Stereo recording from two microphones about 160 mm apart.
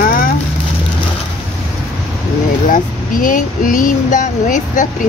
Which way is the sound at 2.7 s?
55° left (ahead or behind).